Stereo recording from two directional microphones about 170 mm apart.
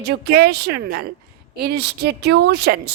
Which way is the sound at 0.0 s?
70° right (ahead or behind).